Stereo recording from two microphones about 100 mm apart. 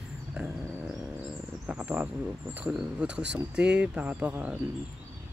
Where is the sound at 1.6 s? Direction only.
15° right (ahead or behind).